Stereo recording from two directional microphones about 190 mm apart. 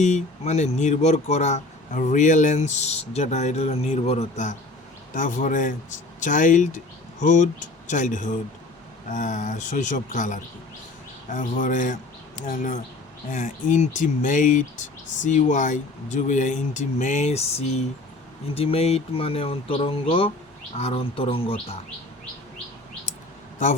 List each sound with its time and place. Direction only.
0.0 s speech: 35° left (ahead or behind)